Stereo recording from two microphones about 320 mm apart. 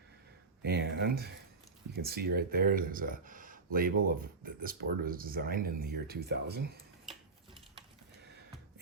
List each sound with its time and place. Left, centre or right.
0.6 s speech: right